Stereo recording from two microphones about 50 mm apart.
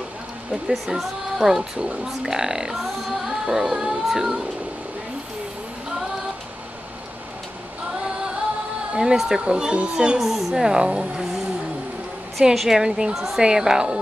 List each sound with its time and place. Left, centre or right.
0.5 s speech: centre
8.9 s speech: centre
10.1 s speech: centre
12.5 s speech: centre
13.1 s a woman's voice: centre
13.4 s speech: centre